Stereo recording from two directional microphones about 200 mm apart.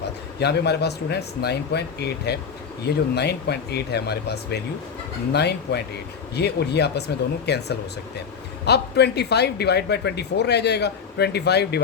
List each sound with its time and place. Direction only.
0.3 s speech: 55° left (ahead or behind)